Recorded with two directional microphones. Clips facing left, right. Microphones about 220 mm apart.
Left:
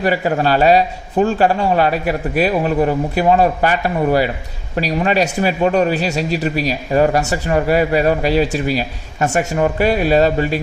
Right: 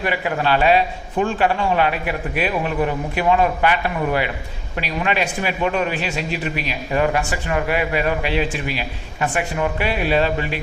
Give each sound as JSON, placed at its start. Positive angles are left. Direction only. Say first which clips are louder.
{"t": 0.0, "sound": "a man's voice", "louder": "left 5 dB", "side_deg": 40}